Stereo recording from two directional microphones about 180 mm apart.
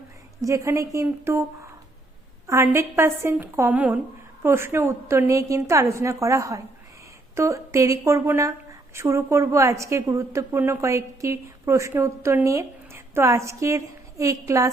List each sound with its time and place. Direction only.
0.4 s a woman's voice: 15° right (ahead or behind)